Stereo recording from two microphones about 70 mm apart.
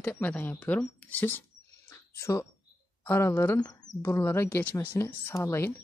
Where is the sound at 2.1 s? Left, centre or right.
Left.